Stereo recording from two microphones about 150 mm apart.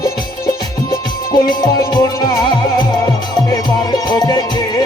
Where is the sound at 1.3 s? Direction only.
30° left (ahead or behind).